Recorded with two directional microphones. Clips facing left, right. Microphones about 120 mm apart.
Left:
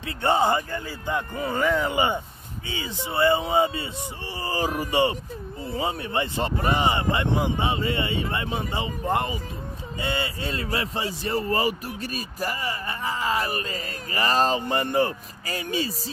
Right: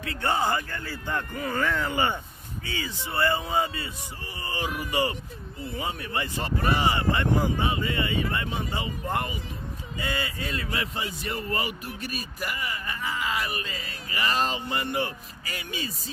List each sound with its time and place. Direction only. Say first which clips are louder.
0.0 s a man's voice: left 4 dB; 25° left (ahead or behind)